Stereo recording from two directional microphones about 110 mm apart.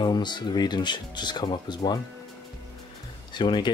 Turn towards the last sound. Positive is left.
turn(degrees=45)  # may be behind; listen again after turning